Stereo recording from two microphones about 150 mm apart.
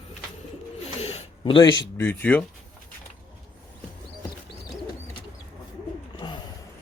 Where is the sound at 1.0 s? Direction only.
45° left (ahead or behind).